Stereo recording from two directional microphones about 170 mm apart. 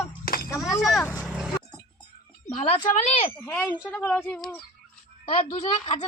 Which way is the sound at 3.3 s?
10° left (ahead or behind).